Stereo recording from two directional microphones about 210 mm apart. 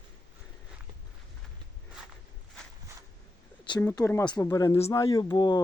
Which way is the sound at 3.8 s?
10° left (ahead or behind).